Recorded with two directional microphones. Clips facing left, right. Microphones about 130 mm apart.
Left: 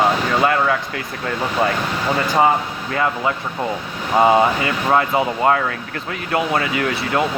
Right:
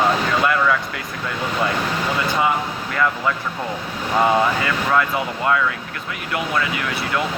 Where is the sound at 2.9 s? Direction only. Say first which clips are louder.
Left 1 dB; 30° left (ahead or behind).